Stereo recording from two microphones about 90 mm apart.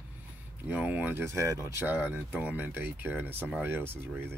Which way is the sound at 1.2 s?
30° right (ahead or behind).